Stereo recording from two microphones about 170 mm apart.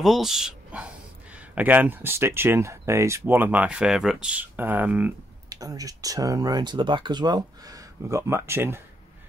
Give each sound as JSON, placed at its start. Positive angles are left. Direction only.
{"t": 0.0, "sound": "speech", "side_deg": 0}
{"t": 5.5, "sound": "speech", "side_deg": -20}